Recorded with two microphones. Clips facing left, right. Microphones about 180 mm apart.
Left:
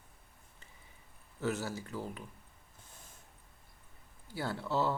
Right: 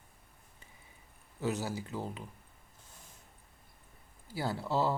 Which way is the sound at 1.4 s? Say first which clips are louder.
Right 1 dB; 15° right (ahead or behind).